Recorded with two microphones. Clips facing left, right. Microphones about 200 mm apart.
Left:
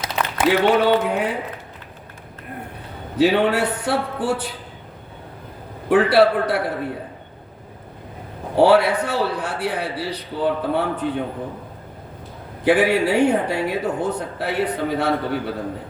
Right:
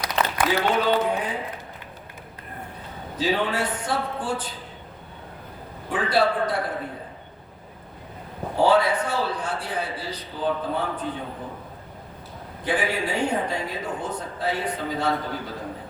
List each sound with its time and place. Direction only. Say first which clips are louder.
0.0 s a sound: left 1 dB; 25° left (ahead or behind)
0.6 s speech: left 5 dB; 65° left (ahead or behind)
3.2 s speech: left 7 dB; 65° left (ahead or behind)
5.9 s speech: left 8 dB; 70° left (ahead or behind)
8.5 s speech: left 5 dB; 70° left (ahead or behind)
12.6 s speech: left 9 dB; 70° left (ahead or behind)